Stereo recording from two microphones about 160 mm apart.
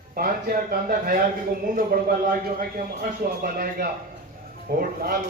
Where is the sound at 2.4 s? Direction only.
65° right (ahead or behind).